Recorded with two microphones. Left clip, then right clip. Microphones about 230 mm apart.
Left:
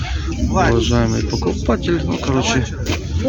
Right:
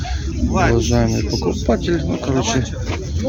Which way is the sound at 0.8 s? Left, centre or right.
Centre.